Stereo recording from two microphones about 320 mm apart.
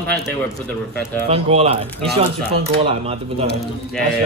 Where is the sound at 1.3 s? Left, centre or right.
Centre.